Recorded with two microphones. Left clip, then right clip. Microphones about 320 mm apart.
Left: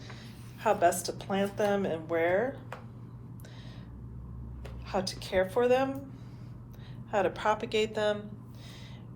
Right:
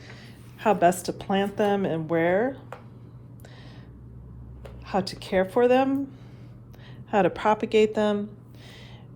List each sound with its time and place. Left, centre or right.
0.6 s a woman's voice: right
4.9 s a woman's voice: right
7.1 s a woman's voice: right